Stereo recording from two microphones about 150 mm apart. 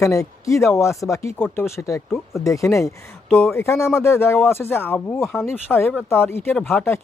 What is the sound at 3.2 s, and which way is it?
Speech, 10° left (ahead or behind).